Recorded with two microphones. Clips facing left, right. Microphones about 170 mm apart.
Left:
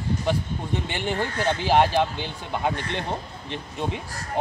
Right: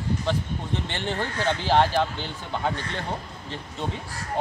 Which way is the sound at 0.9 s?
10° left (ahead or behind).